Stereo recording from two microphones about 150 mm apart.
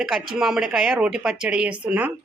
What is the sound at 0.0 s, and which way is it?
Speech, 5° right (ahead or behind).